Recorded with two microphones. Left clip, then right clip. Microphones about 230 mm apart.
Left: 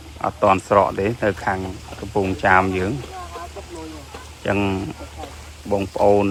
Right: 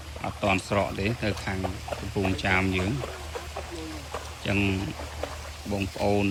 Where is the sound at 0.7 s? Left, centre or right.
Left.